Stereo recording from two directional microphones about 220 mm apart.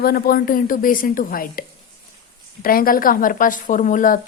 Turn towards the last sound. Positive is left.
turn(degrees=35)  # may be behind; listen again after turning